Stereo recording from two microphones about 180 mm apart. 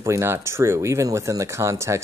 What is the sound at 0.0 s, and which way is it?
Speech, 15° right (ahead or behind).